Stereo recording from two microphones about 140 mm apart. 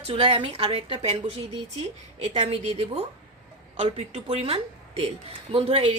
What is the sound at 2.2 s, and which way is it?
Speech, 45° right (ahead or behind).